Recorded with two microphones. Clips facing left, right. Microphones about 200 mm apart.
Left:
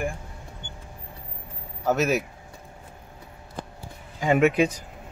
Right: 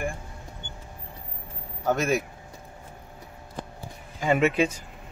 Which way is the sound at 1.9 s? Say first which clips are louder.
Left 1 dB; 5° left (ahead or behind).